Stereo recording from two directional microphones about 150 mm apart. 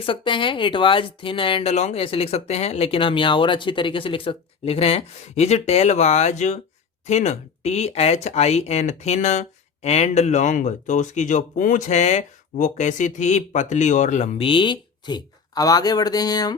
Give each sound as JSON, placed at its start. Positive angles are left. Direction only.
{"t": 0.0, "sound": "speech", "side_deg": 35}